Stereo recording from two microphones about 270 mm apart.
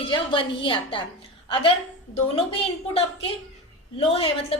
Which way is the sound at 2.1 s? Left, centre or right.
Left.